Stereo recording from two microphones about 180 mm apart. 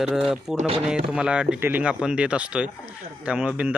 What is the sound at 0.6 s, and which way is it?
Speech, 35° right (ahead or behind).